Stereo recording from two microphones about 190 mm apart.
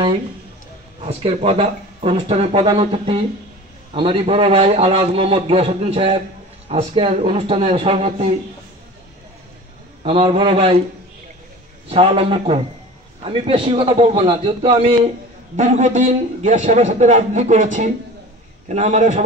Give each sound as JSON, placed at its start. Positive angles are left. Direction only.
{"t": 1.0, "sound": "a man's voice", "side_deg": -30}
{"t": 10.0, "sound": "a man's voice", "side_deg": -30}
{"t": 11.9, "sound": "a man's voice", "side_deg": -30}